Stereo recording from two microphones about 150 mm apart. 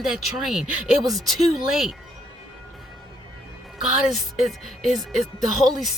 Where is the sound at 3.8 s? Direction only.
Centre (ahead or behind).